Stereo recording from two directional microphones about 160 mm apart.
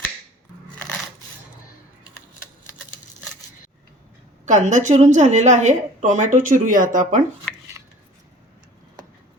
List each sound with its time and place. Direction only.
4.4 s a woman's voice: 50° right (ahead or behind)